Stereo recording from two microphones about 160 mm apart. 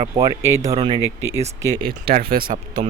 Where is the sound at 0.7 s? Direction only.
35° right (ahead or behind).